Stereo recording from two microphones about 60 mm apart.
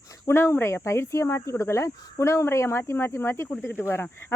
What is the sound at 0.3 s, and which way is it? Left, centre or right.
Speech, left.